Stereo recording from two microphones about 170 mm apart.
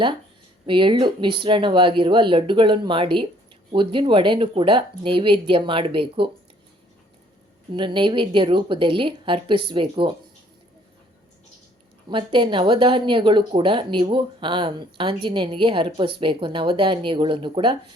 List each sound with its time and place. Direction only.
0.6 s speech: 30° right (ahead or behind)
7.7 s speech: 30° right (ahead or behind)
12.0 s speech: 30° right (ahead or behind)